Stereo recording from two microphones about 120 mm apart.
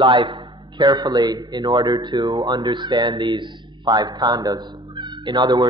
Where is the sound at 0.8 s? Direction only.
35° right (ahead or behind).